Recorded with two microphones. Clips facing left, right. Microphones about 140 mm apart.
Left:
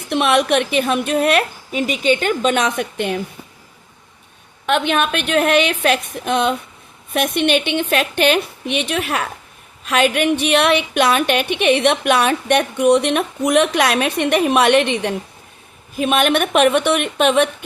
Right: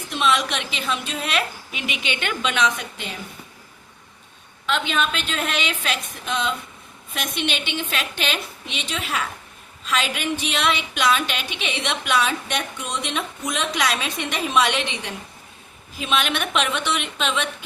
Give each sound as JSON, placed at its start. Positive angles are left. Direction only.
{"t": 0.1, "sound": "a woman's voice", "side_deg": 60}
{"t": 4.6, "sound": "a woman's voice", "side_deg": 60}